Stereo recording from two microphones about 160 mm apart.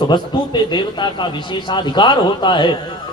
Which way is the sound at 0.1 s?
30° left (ahead or behind).